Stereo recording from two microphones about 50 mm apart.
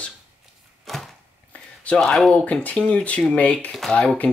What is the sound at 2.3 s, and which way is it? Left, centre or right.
Speech, left.